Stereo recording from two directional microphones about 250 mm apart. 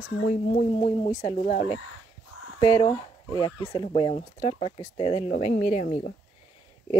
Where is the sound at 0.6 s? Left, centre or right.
Left.